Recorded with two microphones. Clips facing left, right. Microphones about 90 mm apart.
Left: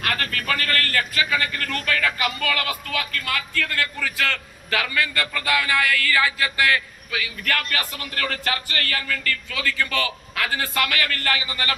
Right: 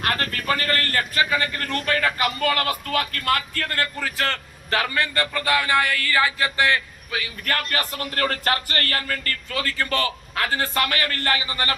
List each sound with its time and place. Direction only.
0.0 s a man's voice: 30° right (ahead or behind)